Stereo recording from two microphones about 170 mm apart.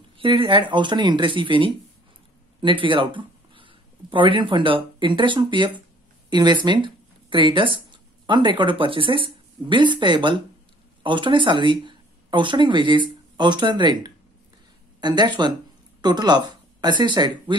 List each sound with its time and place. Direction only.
0.2 s speech: 30° right (ahead or behind)